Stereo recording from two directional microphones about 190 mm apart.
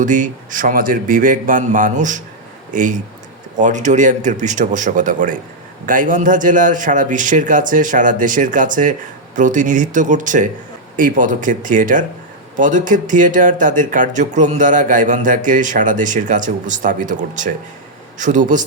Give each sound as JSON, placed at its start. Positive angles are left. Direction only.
{"t": 0.0, "sound": "a man's voice", "side_deg": -45}